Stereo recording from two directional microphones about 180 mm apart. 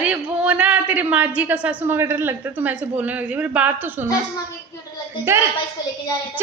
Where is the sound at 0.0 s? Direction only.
5° right (ahead or behind).